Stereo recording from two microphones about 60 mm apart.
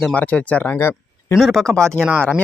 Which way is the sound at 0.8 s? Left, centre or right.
Left.